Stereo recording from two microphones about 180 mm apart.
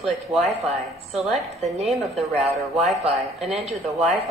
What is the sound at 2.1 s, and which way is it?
Speech, 35° right (ahead or behind).